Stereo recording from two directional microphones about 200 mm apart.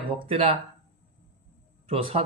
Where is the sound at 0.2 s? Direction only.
30° right (ahead or behind).